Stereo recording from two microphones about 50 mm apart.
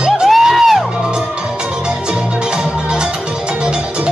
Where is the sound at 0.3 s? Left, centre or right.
Centre.